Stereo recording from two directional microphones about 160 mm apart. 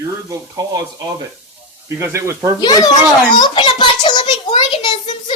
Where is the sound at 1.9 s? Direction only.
15° right (ahead or behind).